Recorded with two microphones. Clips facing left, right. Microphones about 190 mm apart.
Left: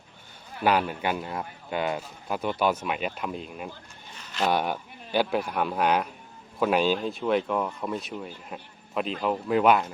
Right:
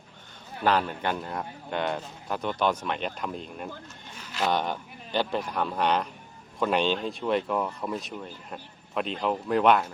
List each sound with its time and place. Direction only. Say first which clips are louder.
0.6 s a man's voice: left 1 dB; 10° left (ahead or behind)